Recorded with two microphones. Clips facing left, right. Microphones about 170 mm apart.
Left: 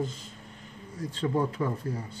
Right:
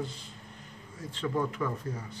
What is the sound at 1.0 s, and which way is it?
Speech, 40° left (ahead or behind).